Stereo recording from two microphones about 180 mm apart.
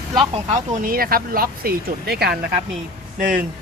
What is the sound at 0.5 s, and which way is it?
Speech, 45° right (ahead or behind).